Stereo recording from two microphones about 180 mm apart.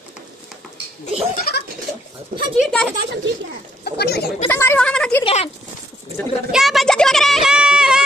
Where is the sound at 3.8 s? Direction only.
60° left (ahead or behind).